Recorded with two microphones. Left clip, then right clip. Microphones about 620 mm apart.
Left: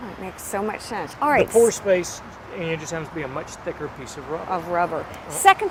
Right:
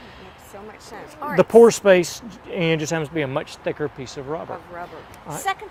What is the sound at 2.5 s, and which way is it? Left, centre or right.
Speech, right.